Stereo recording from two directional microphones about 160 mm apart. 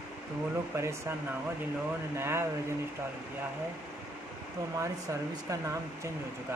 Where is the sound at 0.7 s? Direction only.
15° right (ahead or behind).